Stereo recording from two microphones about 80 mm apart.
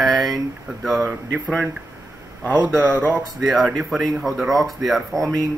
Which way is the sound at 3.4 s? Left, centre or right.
Centre.